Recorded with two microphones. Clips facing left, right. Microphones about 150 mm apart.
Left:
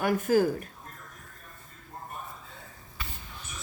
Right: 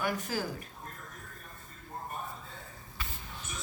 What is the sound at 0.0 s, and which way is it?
Speech, 50° left (ahead or behind).